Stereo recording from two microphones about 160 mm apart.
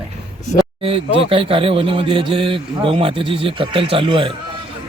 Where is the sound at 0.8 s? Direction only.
35° right (ahead or behind).